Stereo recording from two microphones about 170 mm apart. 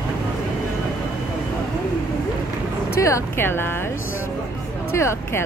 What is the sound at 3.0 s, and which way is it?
Speech, 15° left (ahead or behind).